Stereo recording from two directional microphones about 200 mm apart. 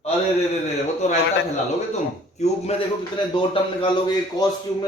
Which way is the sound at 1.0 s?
35° left (ahead or behind).